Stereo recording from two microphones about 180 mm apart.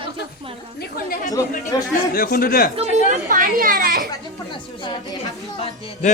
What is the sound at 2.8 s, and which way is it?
Speech, 45° right (ahead or behind).